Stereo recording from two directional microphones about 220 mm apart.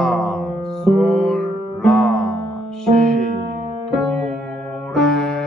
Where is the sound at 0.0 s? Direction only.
Centre (ahead or behind).